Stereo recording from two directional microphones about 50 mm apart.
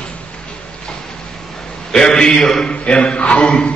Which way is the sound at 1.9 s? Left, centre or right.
Centre.